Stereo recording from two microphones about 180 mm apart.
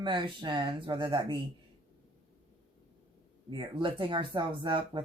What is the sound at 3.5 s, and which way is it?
Speech, 25° right (ahead or behind).